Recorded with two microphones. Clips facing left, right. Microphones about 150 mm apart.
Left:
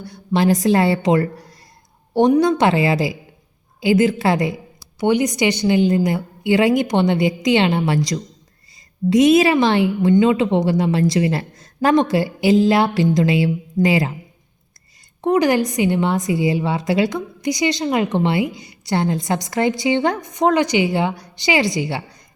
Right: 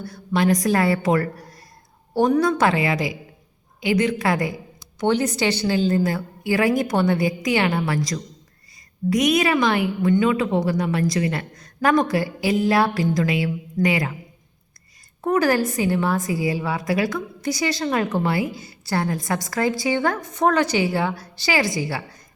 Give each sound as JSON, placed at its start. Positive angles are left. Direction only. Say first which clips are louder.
{"t": 0.1, "sound": "a woman's voice", "louder": "left 3 dB", "side_deg": 25}
{"t": 4.8, "sound": "a woman's voice", "louder": "left 3 dB", "side_deg": 10}
{"t": 15.2, "sound": "a woman's voice", "louder": "left 3 dB", "side_deg": 15}